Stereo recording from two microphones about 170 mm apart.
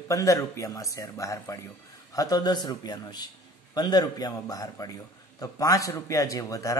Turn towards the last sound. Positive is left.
turn(degrees=20)  # may be behind; listen again after turning